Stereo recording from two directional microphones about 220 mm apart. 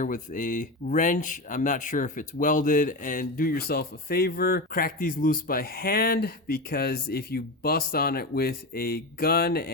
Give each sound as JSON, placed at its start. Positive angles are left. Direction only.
{"t": 0.0, "sound": "speech", "side_deg": 35}